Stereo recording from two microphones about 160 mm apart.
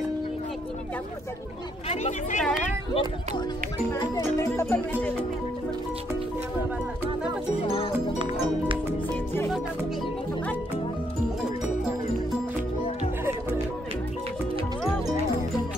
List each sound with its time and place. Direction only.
1.9 s speech: 45° left (ahead or behind)
2.9 s speech: 30° left (ahead or behind)
3.9 s speech: 20° left (ahead or behind)
7.6 s music: 35° left (ahead or behind)